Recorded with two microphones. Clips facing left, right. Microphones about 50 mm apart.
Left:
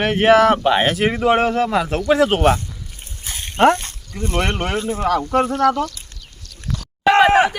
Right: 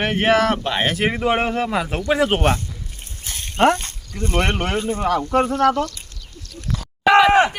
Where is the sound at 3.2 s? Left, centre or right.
Left.